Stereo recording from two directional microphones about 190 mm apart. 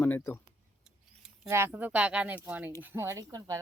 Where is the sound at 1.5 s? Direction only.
10° right (ahead or behind).